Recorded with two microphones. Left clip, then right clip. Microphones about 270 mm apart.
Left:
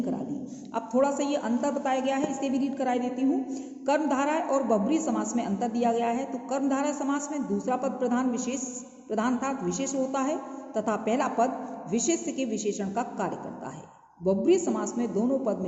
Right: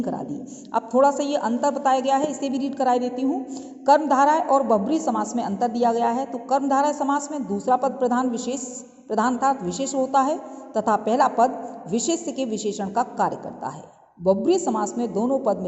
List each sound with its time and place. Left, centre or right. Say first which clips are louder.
0.7 s a man's voice: right 7 dB; right